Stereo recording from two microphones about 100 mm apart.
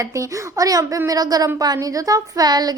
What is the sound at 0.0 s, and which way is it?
A woman's voice, 30° right (ahead or behind).